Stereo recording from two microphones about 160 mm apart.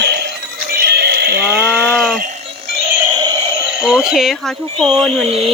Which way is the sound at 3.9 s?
Centre (ahead or behind).